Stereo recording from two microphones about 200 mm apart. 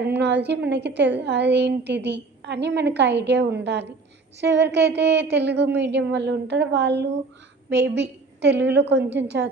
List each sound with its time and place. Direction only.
0.0 s a woman's voice: 60° right (ahead or behind)